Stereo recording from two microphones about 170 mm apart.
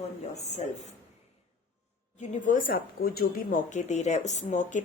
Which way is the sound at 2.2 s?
45° left (ahead or behind).